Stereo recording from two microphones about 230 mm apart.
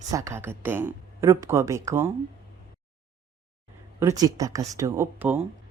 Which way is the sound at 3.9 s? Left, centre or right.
Centre.